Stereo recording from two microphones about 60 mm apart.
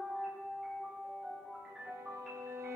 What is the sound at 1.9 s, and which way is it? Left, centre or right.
Music, right.